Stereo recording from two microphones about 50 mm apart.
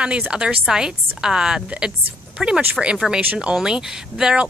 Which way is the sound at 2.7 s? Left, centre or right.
Centre.